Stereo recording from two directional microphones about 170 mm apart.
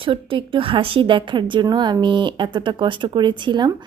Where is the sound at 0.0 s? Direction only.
30° right (ahead or behind).